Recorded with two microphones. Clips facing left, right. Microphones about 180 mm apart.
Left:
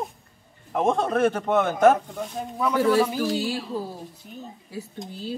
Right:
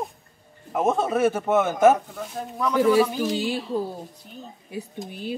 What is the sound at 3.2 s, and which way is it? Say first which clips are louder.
Speech: even; 20° right (ahead or behind).